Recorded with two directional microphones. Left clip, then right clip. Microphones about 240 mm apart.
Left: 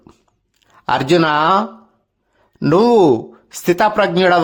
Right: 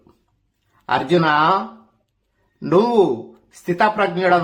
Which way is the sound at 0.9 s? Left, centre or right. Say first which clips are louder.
Left 3 dB; left.